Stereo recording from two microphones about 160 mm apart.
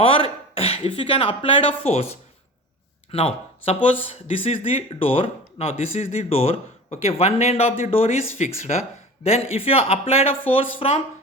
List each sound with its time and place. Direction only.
0.0 s speech: 35° left (ahead or behind)